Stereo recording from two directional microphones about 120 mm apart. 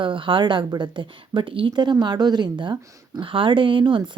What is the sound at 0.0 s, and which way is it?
Speech, 45° right (ahead or behind).